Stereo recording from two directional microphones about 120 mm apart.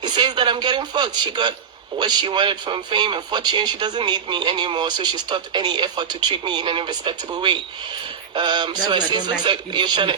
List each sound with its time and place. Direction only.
0.0 s speech: 40° right (ahead or behind)